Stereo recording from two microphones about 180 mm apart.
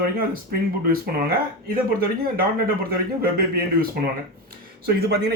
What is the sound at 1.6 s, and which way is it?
Speech, 55° right (ahead or behind).